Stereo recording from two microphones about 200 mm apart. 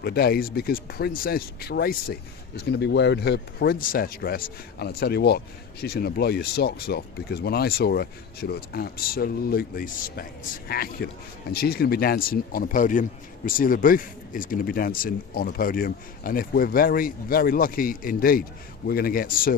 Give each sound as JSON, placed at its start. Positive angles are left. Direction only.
{"t": 0.0, "sound": "speech", "side_deg": 50}